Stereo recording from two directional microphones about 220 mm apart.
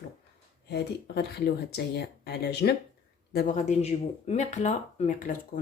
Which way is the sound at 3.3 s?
35° left (ahead or behind).